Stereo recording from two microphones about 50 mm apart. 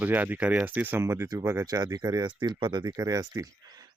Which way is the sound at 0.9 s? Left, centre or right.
Right.